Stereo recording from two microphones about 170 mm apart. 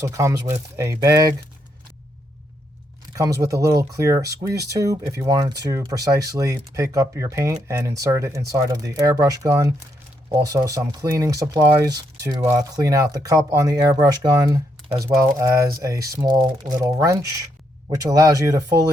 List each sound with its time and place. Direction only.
0.0 s speech: 15° right (ahead or behind)
3.2 s speech: 20° right (ahead or behind)